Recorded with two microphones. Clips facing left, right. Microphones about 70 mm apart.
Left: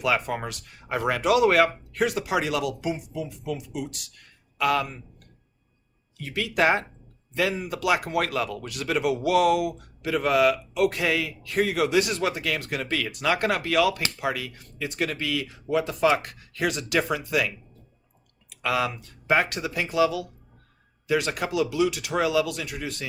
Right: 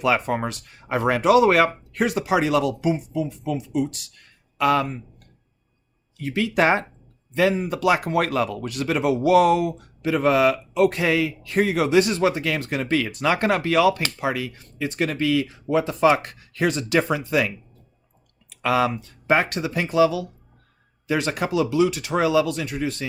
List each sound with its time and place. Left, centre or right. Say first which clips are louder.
0.0 s speech: right 4 dB; right
4.6 s speech: right 4 dB; right
6.2 s speech: right 3 dB; right